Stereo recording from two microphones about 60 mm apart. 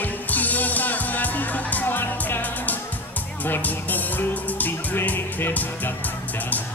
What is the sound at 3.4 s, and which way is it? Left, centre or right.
Speech, left.